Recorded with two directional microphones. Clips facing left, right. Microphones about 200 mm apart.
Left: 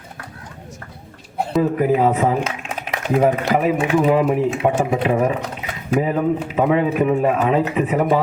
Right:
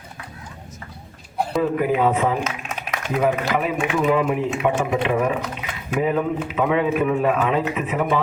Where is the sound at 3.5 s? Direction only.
35° left (ahead or behind).